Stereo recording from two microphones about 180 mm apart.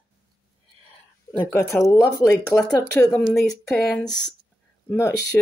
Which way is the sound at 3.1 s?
Centre (ahead or behind).